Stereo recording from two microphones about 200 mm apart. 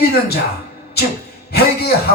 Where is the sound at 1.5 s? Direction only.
50° left (ahead or behind).